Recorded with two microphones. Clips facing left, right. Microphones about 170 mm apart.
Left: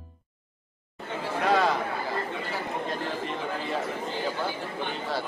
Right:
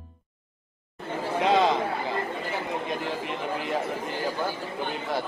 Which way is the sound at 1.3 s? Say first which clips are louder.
Right 2 dB; 20° right (ahead or behind).